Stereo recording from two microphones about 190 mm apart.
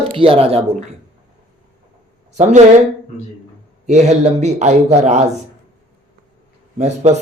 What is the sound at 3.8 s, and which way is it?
Speech, 35° right (ahead or behind).